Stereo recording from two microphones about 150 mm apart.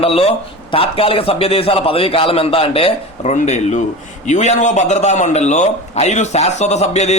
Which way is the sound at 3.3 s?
50° left (ahead or behind).